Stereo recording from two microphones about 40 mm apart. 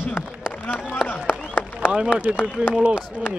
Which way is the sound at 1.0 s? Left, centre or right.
Left.